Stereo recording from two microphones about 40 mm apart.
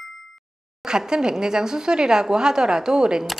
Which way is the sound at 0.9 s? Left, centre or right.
Centre.